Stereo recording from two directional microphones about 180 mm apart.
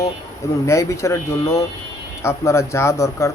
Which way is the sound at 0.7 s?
15° left (ahead or behind).